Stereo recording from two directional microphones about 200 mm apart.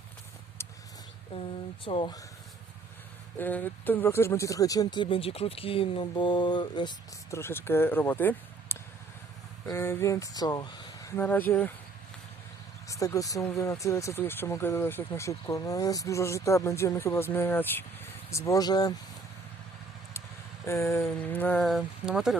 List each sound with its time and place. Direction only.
0.6 s a sound: 15° left (ahead or behind)
1.3 s speech: 25° left (ahead or behind)
3.3 s speech: 10° left (ahead or behind)
11.2 s speech: 10° left (ahead or behind)
12.9 s speech: 15° left (ahead or behind)
20.7 s speech: 15° left (ahead or behind); by 22.4 s 5° right (ahead or behind)